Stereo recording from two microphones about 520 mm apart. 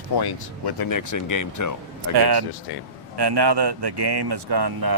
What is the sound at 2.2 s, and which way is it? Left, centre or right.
Speech, right.